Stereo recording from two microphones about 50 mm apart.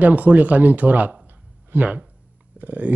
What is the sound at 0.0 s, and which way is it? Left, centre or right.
Speech, right.